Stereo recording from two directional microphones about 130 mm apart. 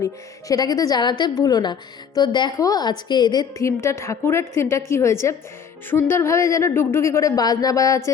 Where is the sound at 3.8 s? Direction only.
20° left (ahead or behind).